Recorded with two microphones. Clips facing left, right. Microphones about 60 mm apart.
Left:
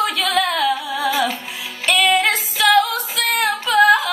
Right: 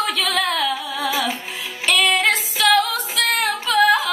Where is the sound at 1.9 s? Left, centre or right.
Centre.